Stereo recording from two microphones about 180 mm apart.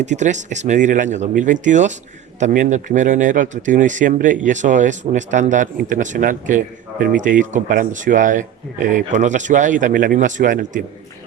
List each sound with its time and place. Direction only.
0.0 s speech: 40° right (ahead or behind)